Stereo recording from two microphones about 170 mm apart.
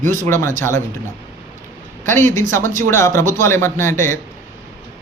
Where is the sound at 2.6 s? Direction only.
50° right (ahead or behind).